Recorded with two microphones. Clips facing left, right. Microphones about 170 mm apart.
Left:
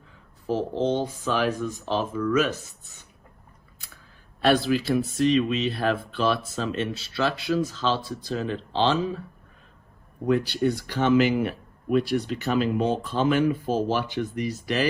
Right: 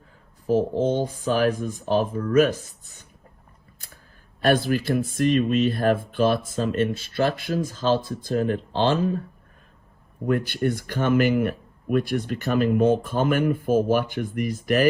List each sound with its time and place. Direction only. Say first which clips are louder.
0.5 s speech: right 3 dB; 45° right (ahead or behind)
4.5 s speech: even; 50° right (ahead or behind)
10.2 s speech: even; 55° right (ahead or behind)